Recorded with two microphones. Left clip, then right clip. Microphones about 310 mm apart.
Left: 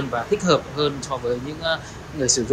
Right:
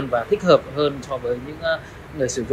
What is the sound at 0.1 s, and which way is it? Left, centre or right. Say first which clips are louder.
Speech: right 4 dB; centre.